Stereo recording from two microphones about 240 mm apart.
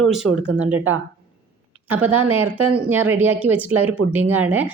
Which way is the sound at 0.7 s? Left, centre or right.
Right.